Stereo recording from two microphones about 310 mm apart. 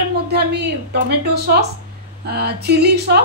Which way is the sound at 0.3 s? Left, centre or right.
Right.